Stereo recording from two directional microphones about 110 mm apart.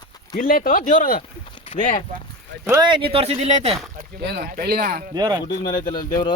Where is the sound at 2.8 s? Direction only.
50° right (ahead or behind); by 3.7 s 75° right (ahead or behind).